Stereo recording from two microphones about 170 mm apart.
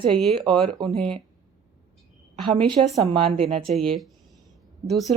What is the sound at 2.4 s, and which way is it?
A woman's voice, 30° right (ahead or behind).